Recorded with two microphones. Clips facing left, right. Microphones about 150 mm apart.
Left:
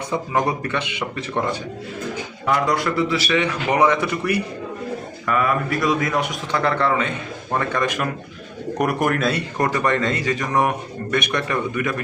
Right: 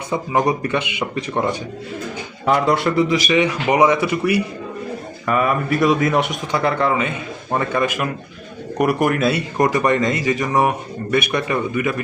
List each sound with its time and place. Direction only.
0.1 s speech: 15° right (ahead or behind)
5.2 s speech: 20° right (ahead or behind)
6.5 s speech: 10° right (ahead or behind)